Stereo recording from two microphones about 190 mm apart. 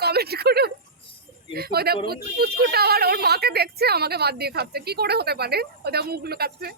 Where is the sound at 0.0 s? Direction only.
55° right (ahead or behind).